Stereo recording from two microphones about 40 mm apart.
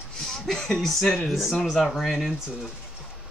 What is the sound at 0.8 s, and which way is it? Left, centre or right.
A man's voice, centre.